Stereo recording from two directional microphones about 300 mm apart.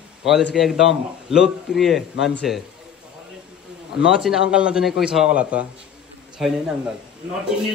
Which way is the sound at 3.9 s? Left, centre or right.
Centre.